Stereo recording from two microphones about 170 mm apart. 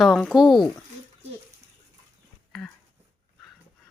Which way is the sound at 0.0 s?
Centre (ahead or behind).